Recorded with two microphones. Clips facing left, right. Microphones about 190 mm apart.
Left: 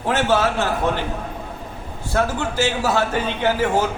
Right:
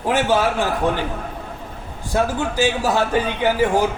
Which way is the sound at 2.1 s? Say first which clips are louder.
Right 1 dB; 15° right (ahead or behind).